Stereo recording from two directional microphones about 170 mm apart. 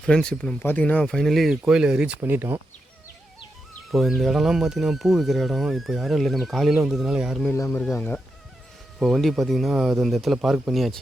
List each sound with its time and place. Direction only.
0.0 s speech: 5° left (ahead or behind); by 2.6 s 10° right (ahead or behind)
3.9 s speech: centre (ahead or behind)
7.5 s speech: 15° left (ahead or behind)
7.8 s speech: 5° left (ahead or behind)